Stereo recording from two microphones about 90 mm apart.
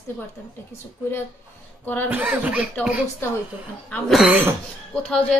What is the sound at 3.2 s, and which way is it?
Speech, 25° left (ahead or behind).